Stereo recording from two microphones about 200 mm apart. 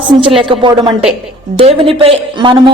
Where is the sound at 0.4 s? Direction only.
25° right (ahead or behind).